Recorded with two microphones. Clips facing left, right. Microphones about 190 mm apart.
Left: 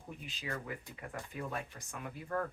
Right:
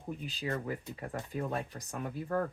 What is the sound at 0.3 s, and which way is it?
Speech, 35° right (ahead or behind).